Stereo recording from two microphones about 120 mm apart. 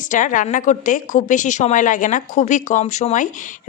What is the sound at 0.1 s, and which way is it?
Speech, 90° left.